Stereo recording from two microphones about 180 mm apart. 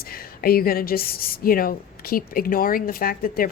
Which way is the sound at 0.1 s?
55° left (ahead or behind).